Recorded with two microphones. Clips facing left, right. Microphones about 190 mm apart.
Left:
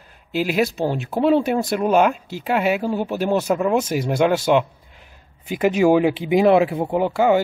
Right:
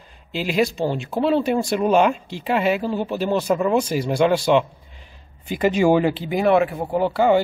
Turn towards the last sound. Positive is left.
turn(degrees=10)  # may be behind; listen again after turning